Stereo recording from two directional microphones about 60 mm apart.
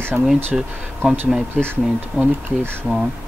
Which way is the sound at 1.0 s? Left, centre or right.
Right.